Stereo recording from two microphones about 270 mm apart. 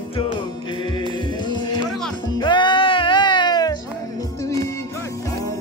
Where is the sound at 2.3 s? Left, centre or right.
Centre.